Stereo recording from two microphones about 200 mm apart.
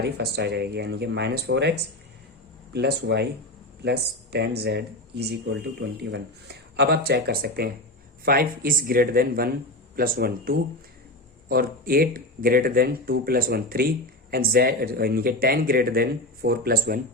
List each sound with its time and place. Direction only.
0.0 s speech: 55° right (ahead or behind)
2.7 s speech: 55° right (ahead or behind)